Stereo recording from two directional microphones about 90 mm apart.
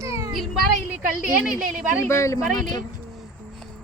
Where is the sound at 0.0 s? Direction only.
35° right (ahead or behind).